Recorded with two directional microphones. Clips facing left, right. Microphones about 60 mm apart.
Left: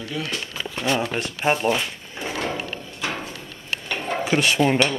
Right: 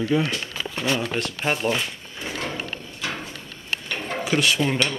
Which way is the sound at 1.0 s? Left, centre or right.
Centre.